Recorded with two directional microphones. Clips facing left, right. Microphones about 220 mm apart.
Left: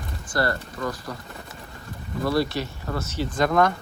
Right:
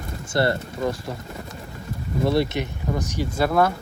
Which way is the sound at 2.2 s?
25° right (ahead or behind).